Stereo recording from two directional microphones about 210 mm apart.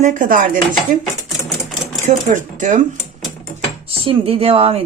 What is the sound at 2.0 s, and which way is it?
Speech, 35° right (ahead or behind).